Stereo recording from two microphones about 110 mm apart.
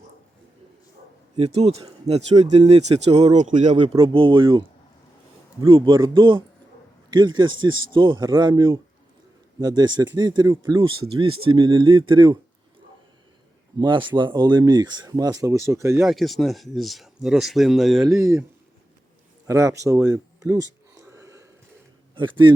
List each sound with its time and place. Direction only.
1.4 s speech: 70° right (ahead or behind); by 3.8 s 90° right
4.0 s speech: 55° right (ahead or behind)
5.6 s speech: 50° right (ahead or behind); by 10.8 s 35° right (ahead or behind)
10.8 s speech: 50° right (ahead or behind)
13.7 s speech: 45° right (ahead or behind); by 16.0 s 25° right (ahead or behind)
16.0 s speech: centre (ahead or behind)
18.0 s speech: 30° right (ahead or behind)
19.5 s speech: 30° right (ahead or behind)
20.1 s a sound: 25° right (ahead or behind)
22.1 s a man's voice: 45° right (ahead or behind)